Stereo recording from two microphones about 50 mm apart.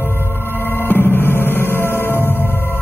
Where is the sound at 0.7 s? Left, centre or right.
Left.